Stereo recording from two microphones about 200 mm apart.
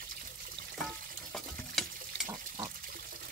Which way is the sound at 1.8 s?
Centre (ahead or behind).